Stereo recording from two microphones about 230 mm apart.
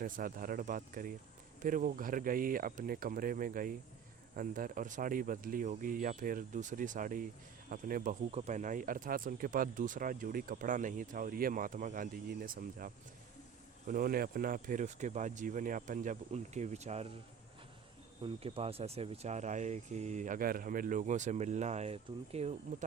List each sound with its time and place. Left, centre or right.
0.0 s speech: right
18.2 s speech: right